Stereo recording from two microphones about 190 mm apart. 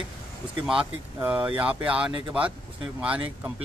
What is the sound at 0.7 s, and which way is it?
Speech, 5° right (ahead or behind).